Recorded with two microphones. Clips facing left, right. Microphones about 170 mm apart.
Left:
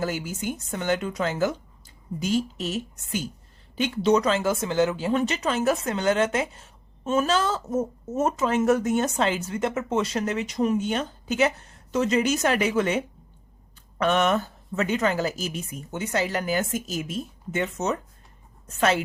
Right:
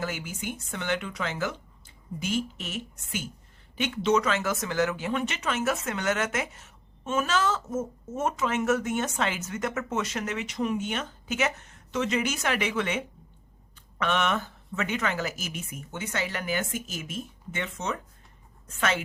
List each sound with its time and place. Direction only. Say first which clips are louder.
0.0 s speech: left 5 dB; 40° left (ahead or behind)
14.0 s speech: left 5 dB; 40° left (ahead or behind)